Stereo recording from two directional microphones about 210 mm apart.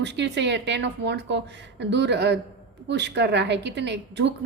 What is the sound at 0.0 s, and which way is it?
A woman's voice, 55° right (ahead or behind).